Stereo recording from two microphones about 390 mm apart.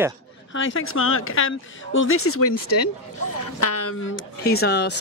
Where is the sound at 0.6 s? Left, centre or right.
Left.